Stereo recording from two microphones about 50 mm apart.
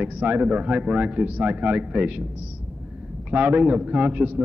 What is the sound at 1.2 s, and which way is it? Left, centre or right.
A man's voice, right.